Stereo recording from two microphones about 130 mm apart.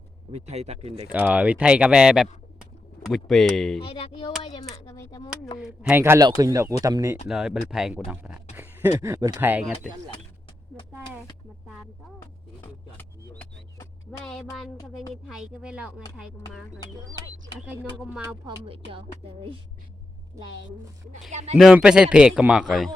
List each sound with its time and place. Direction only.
0.3 s speech: 55° right (ahead or behind)
1.1 s a man's voice: 10° right (ahead or behind)
3.8 s speech: 45° left (ahead or behind)
5.5 s speech: 5° right (ahead or behind)
6.0 s speech: 20° right (ahead or behind)
7.3 s a man's voice: 5° right (ahead or behind)
8.5 s a sound: 15° right (ahead or behind)
9.0 s speech: 25° right (ahead or behind)
13.0 s speech: 15° left (ahead or behind)
14.3 s a man's voice: centre (ahead or behind)
18.4 s speech: 45° right (ahead or behind)
21.2 s speech: 65° right (ahead or behind)
21.6 s a man's voice: 5° right (ahead or behind)